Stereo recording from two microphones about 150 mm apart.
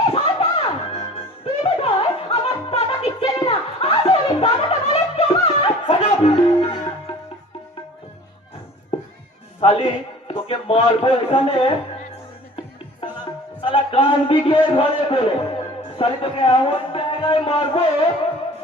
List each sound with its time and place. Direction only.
0.1 s a sound: 40° left (ahead or behind)
1.5 s music: 40° left (ahead or behind)
9.6 s a man's voice: 35° left (ahead or behind)
13.6 s a man's voice: 35° left (ahead or behind)